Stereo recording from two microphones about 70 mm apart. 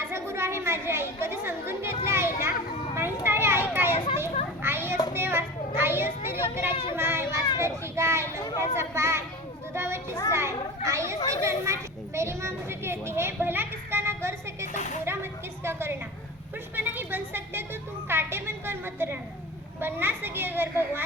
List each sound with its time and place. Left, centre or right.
0.0 s a woman's voice: right
2.9 s children playing: right
5.1 s a child's voice: right